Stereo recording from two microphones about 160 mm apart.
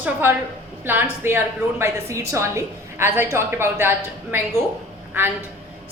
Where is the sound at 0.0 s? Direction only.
15° right (ahead or behind).